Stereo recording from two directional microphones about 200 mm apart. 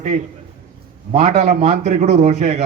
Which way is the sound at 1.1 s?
35° right (ahead or behind).